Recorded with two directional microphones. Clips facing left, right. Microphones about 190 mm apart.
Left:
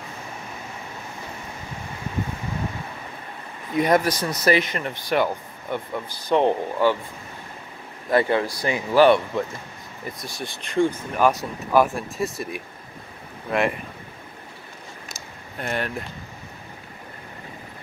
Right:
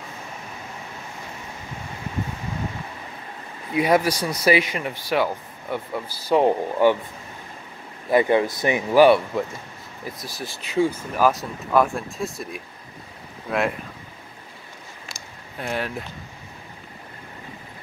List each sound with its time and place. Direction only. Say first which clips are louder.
3.7 s speech: even; 10° right (ahead or behind)
8.1 s speech: right 2 dB; 15° right (ahead or behind)
8.9 s speech: right 1 dB; 10° right (ahead or behind)
15.1 s a sound: even; centre (ahead or behind)